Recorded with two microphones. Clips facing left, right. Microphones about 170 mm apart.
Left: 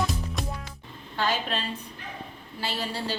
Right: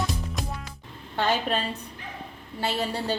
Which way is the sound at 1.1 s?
55° right (ahead or behind).